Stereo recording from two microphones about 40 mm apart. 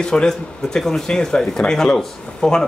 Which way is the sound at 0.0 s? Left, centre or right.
Centre.